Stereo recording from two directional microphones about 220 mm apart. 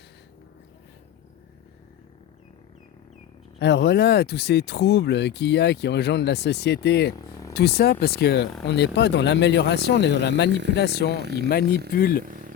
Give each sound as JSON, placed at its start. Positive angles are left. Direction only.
{"t": 3.6, "sound": "speech", "side_deg": 50}
{"t": 11.2, "sound": "speech", "side_deg": -45}
{"t": 11.9, "sound": "speech", "side_deg": 45}
{"t": 12.2, "sound": "a sound", "side_deg": -40}